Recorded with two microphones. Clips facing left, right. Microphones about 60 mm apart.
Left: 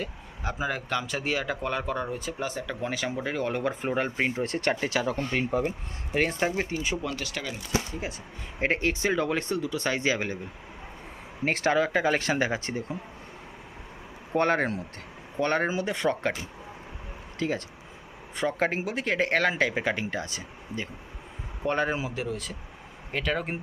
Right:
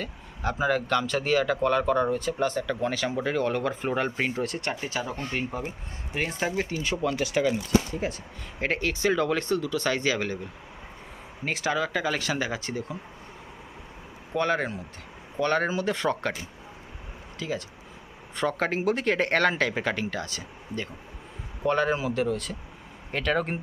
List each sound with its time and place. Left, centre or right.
0.0 s speech: centre
4.4 s speech: left
4.8 s speech: left
6.4 s speech: left
6.9 s speech: centre
7.2 s speech: centre
7.9 s speech: centre
8.5 s speech: left
11.4 s speech: left
14.3 s speech: left
15.4 s speech: left
17.4 s speech: left
18.3 s speech: centre
18.9 s speech: centre